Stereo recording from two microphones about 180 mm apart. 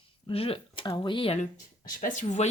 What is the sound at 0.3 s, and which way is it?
Speech, 30° left (ahead or behind).